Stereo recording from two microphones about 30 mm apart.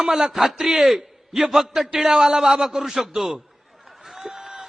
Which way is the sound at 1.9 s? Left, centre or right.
Right.